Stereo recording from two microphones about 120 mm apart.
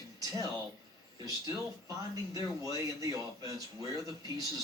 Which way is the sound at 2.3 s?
30° right (ahead or behind).